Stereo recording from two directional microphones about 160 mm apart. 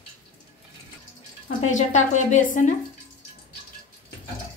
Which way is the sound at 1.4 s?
50° left (ahead or behind).